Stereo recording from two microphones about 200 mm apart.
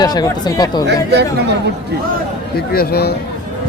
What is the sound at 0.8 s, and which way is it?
Speech, 55° right (ahead or behind).